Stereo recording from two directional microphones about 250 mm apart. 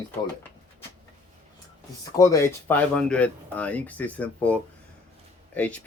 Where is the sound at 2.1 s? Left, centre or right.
Centre.